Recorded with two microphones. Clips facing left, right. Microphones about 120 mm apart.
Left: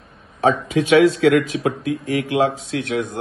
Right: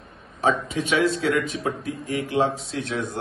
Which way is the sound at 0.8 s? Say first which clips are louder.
Left 8 dB; 80° left.